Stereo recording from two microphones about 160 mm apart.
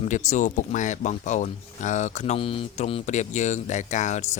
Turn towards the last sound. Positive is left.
turn(degrees=50)  # may be behind; listen again after turning